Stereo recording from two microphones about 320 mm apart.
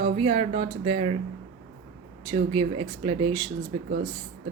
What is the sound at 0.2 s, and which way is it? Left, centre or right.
Speech, centre.